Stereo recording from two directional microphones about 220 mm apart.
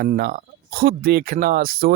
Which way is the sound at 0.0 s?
40° right (ahead or behind).